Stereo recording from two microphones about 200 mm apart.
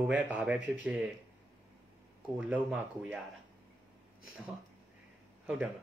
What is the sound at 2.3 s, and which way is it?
Speech, 5° right (ahead or behind).